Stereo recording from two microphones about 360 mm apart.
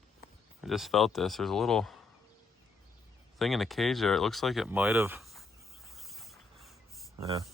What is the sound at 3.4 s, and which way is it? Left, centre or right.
Speech, centre.